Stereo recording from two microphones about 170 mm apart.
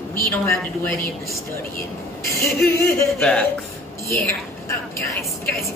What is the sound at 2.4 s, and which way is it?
Speech, 15° left (ahead or behind).